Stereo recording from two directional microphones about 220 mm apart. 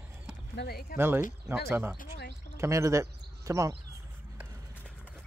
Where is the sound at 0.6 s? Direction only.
45° left (ahead or behind).